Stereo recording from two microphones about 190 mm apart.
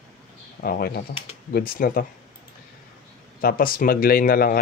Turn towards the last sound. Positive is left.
turn(degrees=50)  # may be behind; listen again after turning